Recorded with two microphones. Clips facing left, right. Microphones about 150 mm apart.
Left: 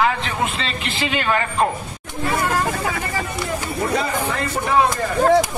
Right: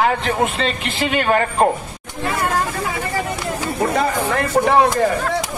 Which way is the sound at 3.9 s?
55° right (ahead or behind).